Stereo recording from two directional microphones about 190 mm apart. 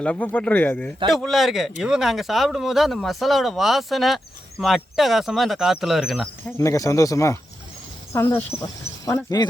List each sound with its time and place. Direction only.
0.0 s speech: 5° left (ahead or behind)
6.6 s speech: 15° left (ahead or behind)